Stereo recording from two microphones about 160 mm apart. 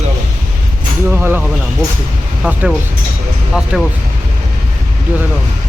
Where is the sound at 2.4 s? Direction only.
5° right (ahead or behind).